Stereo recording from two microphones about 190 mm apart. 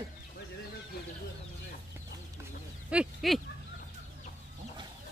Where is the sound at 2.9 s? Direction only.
Centre (ahead or behind).